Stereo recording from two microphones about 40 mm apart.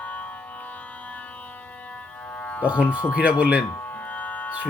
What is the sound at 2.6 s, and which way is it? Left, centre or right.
Speech, right.